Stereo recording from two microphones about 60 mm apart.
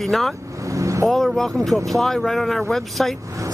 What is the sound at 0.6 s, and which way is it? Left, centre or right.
Vehicle, right.